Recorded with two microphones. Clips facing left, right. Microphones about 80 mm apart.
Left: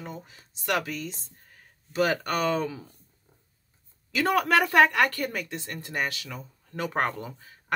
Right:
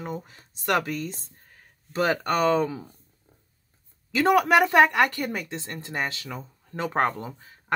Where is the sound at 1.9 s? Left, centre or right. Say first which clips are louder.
Right 2 dB; right.